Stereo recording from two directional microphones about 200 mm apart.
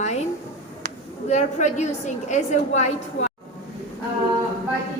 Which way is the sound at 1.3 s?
35° left (ahead or behind).